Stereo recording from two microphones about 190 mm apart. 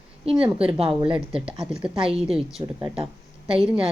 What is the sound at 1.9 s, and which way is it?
Speech, 30° right (ahead or behind).